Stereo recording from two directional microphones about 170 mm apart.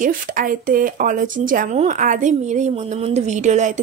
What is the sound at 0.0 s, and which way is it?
Speech, 55° right (ahead or behind).